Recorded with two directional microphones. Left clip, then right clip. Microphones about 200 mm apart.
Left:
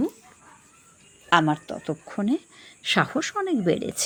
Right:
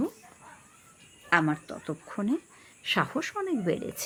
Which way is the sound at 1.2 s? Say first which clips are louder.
Left 5 dB; 20° left (ahead or behind).